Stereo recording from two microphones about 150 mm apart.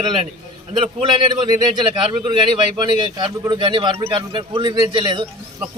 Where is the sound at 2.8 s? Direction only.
30° right (ahead or behind).